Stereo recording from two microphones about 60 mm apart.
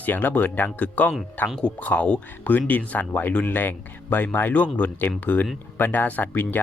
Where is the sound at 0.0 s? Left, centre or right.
Left.